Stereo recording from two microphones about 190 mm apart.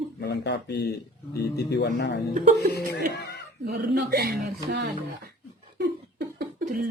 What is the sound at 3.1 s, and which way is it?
Chuckle, 60° left (ahead or behind).